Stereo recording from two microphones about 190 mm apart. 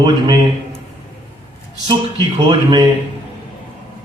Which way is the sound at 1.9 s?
25° right (ahead or behind).